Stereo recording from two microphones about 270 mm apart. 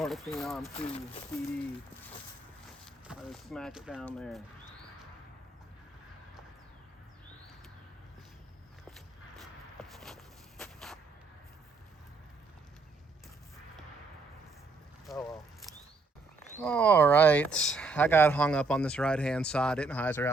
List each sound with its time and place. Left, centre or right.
0.0 s speech: centre
0.8 s speech: left
2.8 s speech: centre
9.9 s a sound: centre
15.0 s biting: centre
16.6 s speech: centre